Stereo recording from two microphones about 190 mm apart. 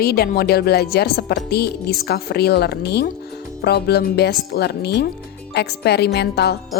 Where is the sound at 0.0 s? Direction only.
55° left (ahead or behind).